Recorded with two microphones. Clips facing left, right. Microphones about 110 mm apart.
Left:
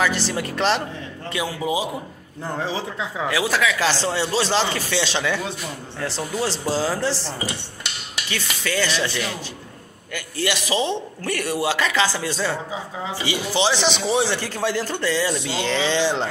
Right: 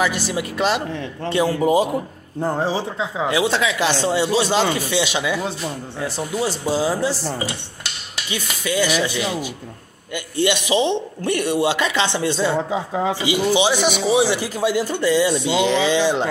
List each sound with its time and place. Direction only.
0.3 s speech: 10° right (ahead or behind)
1.3 s a man's voice: 40° right (ahead or behind)
2.4 s speech: 35° right (ahead or behind)
3.0 s speech: 20° right (ahead or behind)
8.3 s a man's voice: 15° right (ahead or behind)
12.7 s a man's voice: 55° right (ahead or behind)
13.2 s speech: 15° right (ahead or behind)